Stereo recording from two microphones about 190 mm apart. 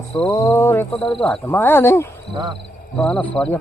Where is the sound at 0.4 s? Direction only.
15° left (ahead or behind).